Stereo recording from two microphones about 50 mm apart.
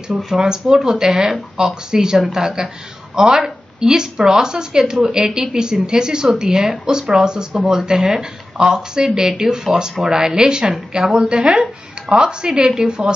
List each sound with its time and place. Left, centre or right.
0.2 s speech: centre